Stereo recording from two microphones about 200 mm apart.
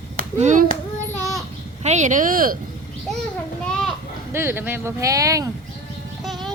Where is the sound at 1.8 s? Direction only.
35° right (ahead or behind).